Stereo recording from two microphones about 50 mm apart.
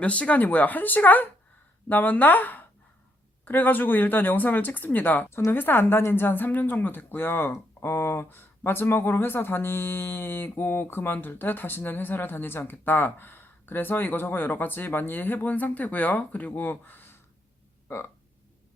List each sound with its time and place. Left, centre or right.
0.0 s speech: left
7.8 s speech: left
17.8 s a sound: left